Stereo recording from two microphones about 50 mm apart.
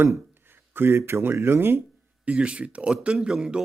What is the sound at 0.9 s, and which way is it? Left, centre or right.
Speech, right.